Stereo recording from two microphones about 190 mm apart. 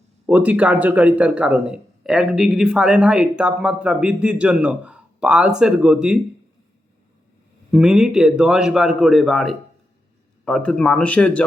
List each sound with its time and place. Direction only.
0.3 s a man's voice: 10° right (ahead or behind)
7.7 s a man's voice: 5° right (ahead or behind)